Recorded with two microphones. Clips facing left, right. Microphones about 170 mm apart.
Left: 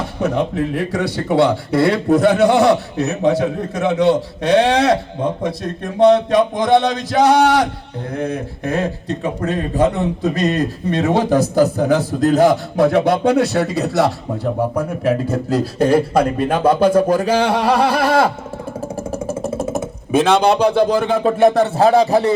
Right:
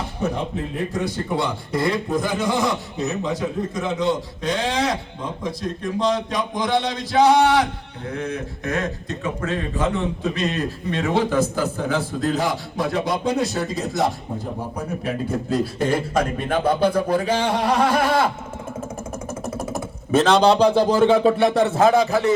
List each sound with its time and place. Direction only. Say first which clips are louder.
0.2 s speech: left 7 dB; 70° left (ahead or behind)
8.6 s a man's voice: left 6 dB; 30° left (ahead or behind)
12.7 s speech: left 9 dB; 65° left (ahead or behind)
17.1 s speech: left 5 dB; 40° left (ahead or behind)
17.3 s speech: left 5 dB; 75° left (ahead or behind)
19.3 s engine: left 6 dB; 25° left (ahead or behind)
20.1 s speech: left 2 dB; 10° left (ahead or behind)
20.5 s speech: left 2 dB; 60° left (ahead or behind); by 22.4 s 35° left (ahead or behind)